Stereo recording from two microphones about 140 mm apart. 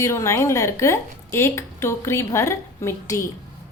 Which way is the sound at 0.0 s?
20° left (ahead or behind).